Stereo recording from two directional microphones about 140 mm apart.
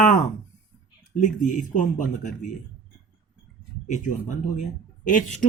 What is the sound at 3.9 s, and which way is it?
Speech, 60° left (ahead or behind).